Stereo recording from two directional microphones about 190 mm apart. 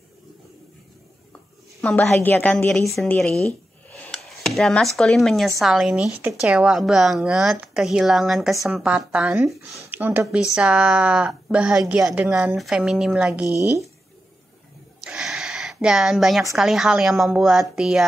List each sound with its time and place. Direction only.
1.8 s a woman's voice: 5° left (ahead or behind)
13.5 s a woman's voice: 15° left (ahead or behind)
15.0 s a sound: centre (ahead or behind)
16.5 s speech: centre (ahead or behind)